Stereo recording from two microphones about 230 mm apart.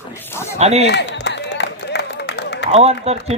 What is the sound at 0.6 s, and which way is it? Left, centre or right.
Speech, right.